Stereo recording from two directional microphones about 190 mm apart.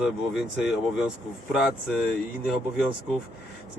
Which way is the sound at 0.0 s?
5° right (ahead or behind).